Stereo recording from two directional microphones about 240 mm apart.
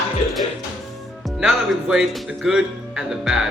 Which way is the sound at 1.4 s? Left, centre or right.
Centre.